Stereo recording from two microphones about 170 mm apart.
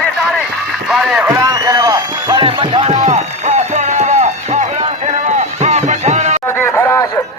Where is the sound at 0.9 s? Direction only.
Centre (ahead or behind).